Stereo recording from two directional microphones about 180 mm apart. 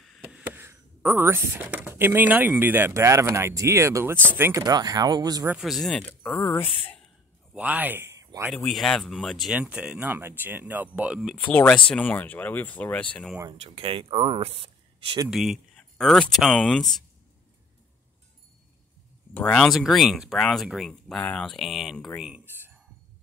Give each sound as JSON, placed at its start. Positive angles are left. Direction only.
{"t": 0.0, "sound": "speech", "side_deg": -5}
{"t": 5.5, "sound": "speech", "side_deg": 0}
{"t": 7.5, "sound": "speech", "side_deg": -10}
{"t": 8.5, "sound": "speech", "side_deg": 0}
{"t": 13.7, "sound": "speech", "side_deg": -30}
{"t": 15.2, "sound": "speech", "side_deg": 0}
{"t": 19.3, "sound": "speech", "side_deg": 5}